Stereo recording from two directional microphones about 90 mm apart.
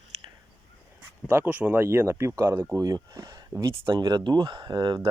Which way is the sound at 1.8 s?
30° right (ahead or behind).